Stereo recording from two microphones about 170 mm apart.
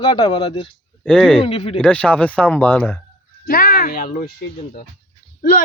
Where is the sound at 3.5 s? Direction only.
60° left (ahead or behind).